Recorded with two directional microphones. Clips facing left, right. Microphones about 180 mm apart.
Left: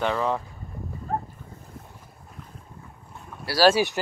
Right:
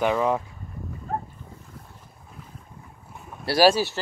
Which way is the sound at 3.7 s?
15° left (ahead or behind).